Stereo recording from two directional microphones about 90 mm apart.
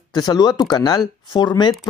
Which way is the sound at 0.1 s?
50° left (ahead or behind).